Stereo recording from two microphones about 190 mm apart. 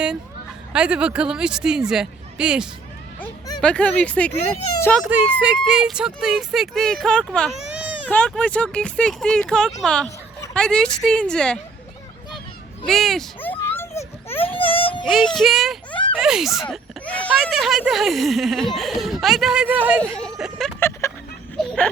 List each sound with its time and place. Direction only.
0.7 s speech: 5° right (ahead or behind)
3.2 s speech: 20° left (ahead or behind)
3.6 s speech: 5° left (ahead or behind)
5.0 s speech: 5° right (ahead or behind)
8.1 s speech: 5° left (ahead or behind)
12.8 s children playing: centre (ahead or behind)
14.4 s baby cry: 30° left (ahead or behind)
15.0 s speech: centre (ahead or behind)
20.0 s speech: 5° left (ahead or behind)